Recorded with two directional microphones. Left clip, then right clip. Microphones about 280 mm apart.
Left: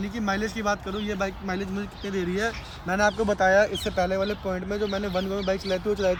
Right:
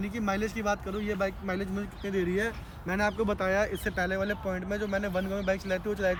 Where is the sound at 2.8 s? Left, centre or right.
Centre.